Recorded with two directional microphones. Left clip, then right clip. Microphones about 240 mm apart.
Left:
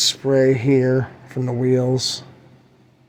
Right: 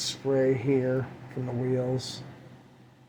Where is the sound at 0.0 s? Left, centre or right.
Left.